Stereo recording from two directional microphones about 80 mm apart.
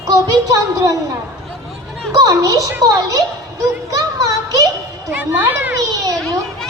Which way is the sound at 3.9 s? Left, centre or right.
Right.